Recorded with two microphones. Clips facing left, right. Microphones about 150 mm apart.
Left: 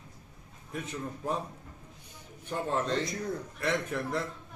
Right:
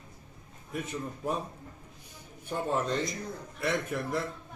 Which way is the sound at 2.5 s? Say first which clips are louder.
Right 1 dB; 10° right (ahead or behind).